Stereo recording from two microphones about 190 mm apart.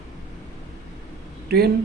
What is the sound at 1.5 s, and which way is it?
Speech, 55° right (ahead or behind).